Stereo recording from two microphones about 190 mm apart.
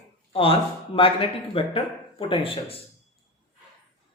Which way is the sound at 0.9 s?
30° left (ahead or behind).